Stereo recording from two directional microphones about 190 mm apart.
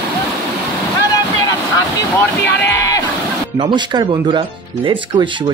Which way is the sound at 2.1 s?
10° left (ahead or behind).